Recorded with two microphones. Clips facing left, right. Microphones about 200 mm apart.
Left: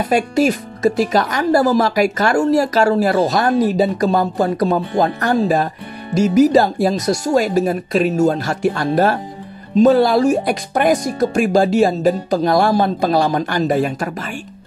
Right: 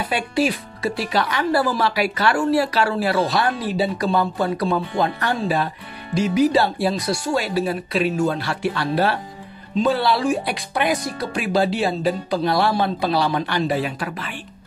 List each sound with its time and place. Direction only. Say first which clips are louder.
0.0 s speech: left 6 dB; 45° left (ahead or behind)